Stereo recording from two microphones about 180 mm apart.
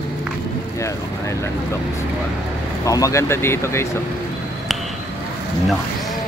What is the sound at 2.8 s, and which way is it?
Speech, 20° left (ahead or behind).